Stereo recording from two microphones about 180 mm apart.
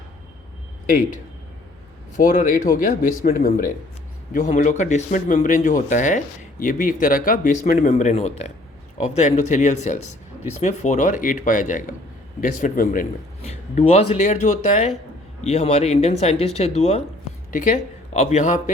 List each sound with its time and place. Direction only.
2.1 s a man's voice: 45° left (ahead or behind)
4.3 s a man's voice: 45° left (ahead or behind)
13.4 s speech: 40° left (ahead or behind)